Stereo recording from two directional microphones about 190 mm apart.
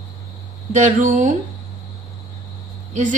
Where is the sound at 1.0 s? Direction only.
40° right (ahead or behind).